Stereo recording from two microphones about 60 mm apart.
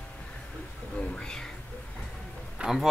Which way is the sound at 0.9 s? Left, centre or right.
Centre.